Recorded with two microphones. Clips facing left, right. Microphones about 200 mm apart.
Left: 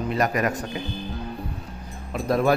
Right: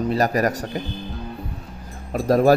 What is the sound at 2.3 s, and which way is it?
Speech, 35° right (ahead or behind).